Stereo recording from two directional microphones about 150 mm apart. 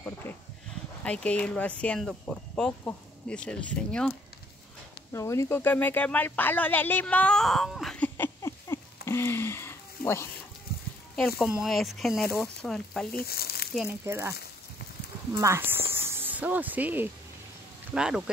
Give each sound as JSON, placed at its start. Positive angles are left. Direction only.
{"t": 0.0, "sound": "a sound", "side_deg": 15}
{"t": 1.0, "sound": "speech", "side_deg": 10}
{"t": 5.1, "sound": "speech", "side_deg": 20}
{"t": 8.4, "sound": "a sound", "side_deg": 20}
{"t": 11.1, "sound": "speech", "side_deg": 0}
{"t": 13.1, "sound": "speech", "side_deg": 90}
{"t": 14.0, "sound": "speech", "side_deg": -20}
{"t": 15.4, "sound": "speech", "side_deg": -15}